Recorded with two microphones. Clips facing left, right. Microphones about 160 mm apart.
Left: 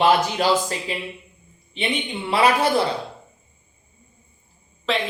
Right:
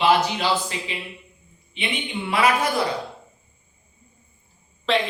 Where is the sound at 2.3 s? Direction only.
30° left (ahead or behind).